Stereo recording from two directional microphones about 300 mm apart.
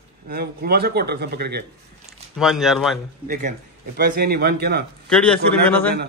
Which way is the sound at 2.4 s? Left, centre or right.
Centre.